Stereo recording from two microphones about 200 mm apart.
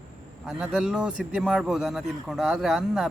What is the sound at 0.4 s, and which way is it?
Speech, 5° right (ahead or behind).